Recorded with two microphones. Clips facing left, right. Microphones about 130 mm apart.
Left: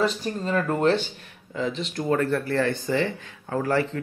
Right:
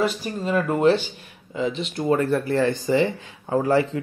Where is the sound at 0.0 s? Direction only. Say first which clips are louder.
Right 1 dB; 10° right (ahead or behind).